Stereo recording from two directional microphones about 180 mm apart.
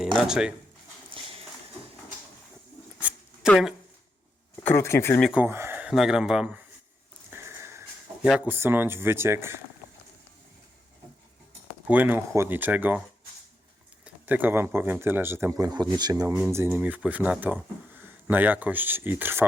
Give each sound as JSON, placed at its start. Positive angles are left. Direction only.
{"t": 0.2, "sound": "speech", "side_deg": -5}
{"t": 1.1, "sound": "clip-clop", "side_deg": -30}
{"t": 3.0, "sound": "zipper", "side_deg": -10}
{"t": 3.5, "sound": "speech", "side_deg": 0}
{"t": 4.6, "sound": "speech", "side_deg": 15}
{"t": 5.2, "sound": "speech", "side_deg": -5}
{"t": 7.3, "sound": "a sound", "side_deg": -10}
{"t": 8.3, "sound": "speech", "side_deg": -10}
{"t": 11.9, "sound": "speech", "side_deg": -10}
{"t": 14.0, "sound": "speech", "side_deg": -10}